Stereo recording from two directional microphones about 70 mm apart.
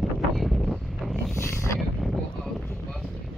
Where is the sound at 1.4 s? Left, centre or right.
Left.